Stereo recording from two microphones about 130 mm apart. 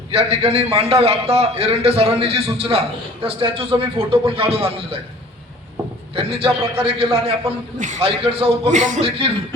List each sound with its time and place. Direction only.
0.1 s a man's voice: 50° right (ahead or behind)
6.1 s a man's voice: 45° right (ahead or behind)
8.7 s speech: 70° right (ahead or behind)
9.0 s a man's voice: 45° right (ahead or behind)